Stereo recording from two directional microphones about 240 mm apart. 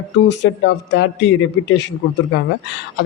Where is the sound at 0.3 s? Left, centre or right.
Left.